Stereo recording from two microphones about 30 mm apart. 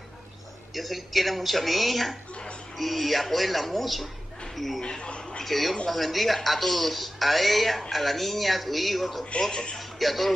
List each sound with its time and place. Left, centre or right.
0.7 s speech: centre
4.8 s speech: left
5.4 s speech: centre
9.4 s a man's voice: left
9.8 s speech: centre